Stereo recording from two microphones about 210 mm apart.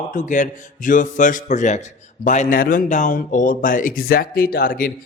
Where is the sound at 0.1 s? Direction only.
40° left (ahead or behind).